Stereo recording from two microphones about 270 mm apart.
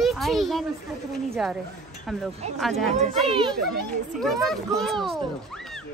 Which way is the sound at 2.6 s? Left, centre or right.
Centre.